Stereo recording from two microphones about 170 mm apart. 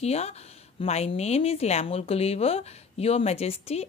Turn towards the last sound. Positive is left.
turn(degrees=40)  # may be behind; listen again after turning